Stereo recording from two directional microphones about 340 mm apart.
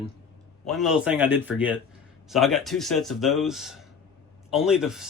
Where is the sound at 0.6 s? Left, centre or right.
Centre.